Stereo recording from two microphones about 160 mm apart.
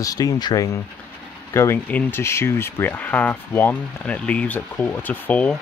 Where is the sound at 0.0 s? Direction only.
20° left (ahead or behind).